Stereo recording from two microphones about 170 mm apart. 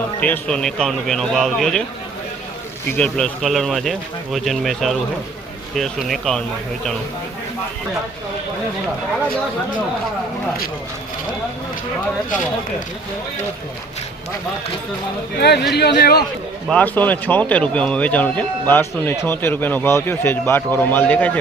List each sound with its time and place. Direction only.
0.2 s speech: 5° left (ahead or behind)
2.9 s speech: 5° left (ahead or behind)
15.4 s a man's voice: 75° left (ahead or behind)
16.6 s speech: 10° left (ahead or behind)